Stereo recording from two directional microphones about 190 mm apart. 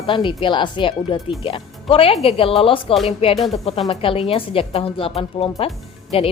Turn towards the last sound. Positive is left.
turn(degrees=30)  # may be behind; listen again after turning